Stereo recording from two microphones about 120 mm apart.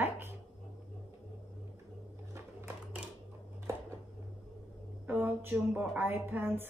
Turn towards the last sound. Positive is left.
turn(degrees=-15)  # may be behind; listen again after turning